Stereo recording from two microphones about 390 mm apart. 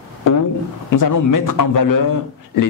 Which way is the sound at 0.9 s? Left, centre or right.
Left.